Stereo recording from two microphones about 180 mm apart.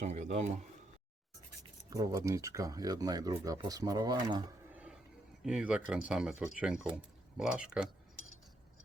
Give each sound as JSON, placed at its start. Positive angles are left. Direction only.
{"t": 0.0, "sound": "speech", "side_deg": -40}
{"t": 1.9, "sound": "speech", "side_deg": -20}
{"t": 4.7, "sound": "a sound", "side_deg": -5}
{"t": 5.4, "sound": "speech", "side_deg": -5}